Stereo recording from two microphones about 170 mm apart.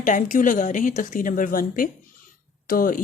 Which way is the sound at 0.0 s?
50° left (ahead or behind).